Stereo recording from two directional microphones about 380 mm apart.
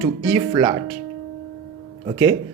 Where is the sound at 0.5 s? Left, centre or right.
Centre.